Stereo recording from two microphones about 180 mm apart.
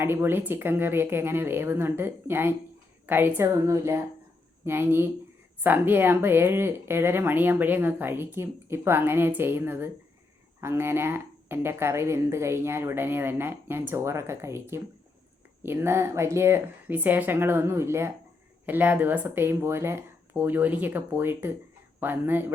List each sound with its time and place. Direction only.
0.0 s speech: 15° right (ahead or behind)